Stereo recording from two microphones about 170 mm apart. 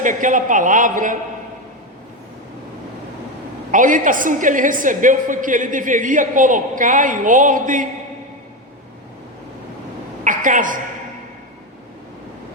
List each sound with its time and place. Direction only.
0.0 s a woman's voice: 50° right (ahead or behind)
3.7 s a woman's voice: 50° right (ahead or behind)
10.2 s a woman's voice: 50° right (ahead or behind)